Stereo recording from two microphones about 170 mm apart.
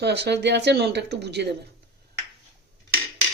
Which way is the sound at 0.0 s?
80° right.